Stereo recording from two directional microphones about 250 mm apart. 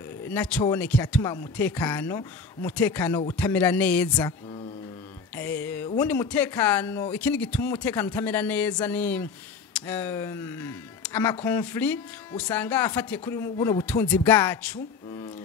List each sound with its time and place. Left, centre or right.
0.3 s speech: centre
5.3 s music: centre
5.9 s speech: centre